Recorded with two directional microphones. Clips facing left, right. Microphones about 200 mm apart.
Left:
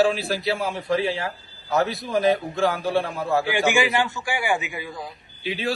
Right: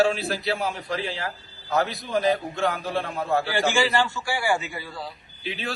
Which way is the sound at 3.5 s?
15° left (ahead or behind).